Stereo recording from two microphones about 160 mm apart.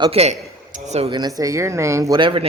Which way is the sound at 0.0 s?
40° right (ahead or behind).